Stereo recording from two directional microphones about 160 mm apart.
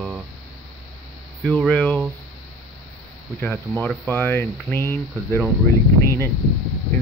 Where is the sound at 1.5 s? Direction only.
5° left (ahead or behind).